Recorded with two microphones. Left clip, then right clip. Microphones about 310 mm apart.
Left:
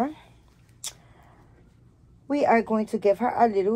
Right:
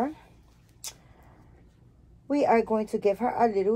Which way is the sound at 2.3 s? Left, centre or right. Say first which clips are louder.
Left 1 dB; left.